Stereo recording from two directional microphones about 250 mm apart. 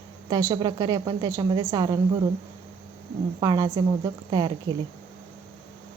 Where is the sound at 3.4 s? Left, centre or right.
Centre.